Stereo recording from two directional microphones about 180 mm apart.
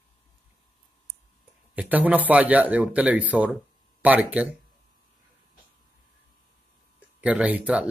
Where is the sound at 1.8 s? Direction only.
10° right (ahead or behind).